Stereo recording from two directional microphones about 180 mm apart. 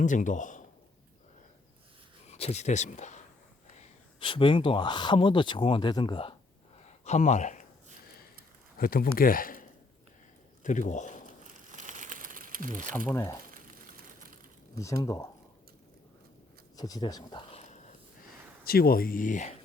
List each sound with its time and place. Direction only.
0.0 s speech: 45° left (ahead or behind)
2.2 s speech: 35° left (ahead or behind)
3.8 s speech: 30° left (ahead or behind)
6.8 s a sound: 40° left (ahead or behind)
8.8 s speech: 55° left (ahead or behind)
11.4 s crumpling: 45° right (ahead or behind)
13.1 s speech: 15° left (ahead or behind)
13.5 s a sound: 50° right (ahead or behind)
15.0 s speech: 15° left (ahead or behind)
16.7 s a sound: 20° left (ahead or behind); by 17.9 s 40° left (ahead or behind)
18.6 s speech: 55° left (ahead or behind)